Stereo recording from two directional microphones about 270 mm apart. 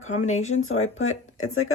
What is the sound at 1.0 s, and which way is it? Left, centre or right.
Speech, left.